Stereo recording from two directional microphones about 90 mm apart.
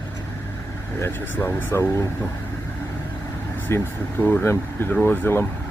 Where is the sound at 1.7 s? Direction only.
30° left (ahead or behind).